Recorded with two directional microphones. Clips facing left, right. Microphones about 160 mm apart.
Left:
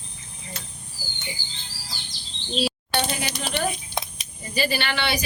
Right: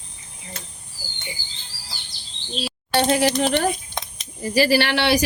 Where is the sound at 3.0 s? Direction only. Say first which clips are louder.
Right 10 dB; 85° right.